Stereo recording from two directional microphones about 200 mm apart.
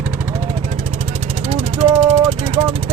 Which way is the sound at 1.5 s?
30° right (ahead or behind).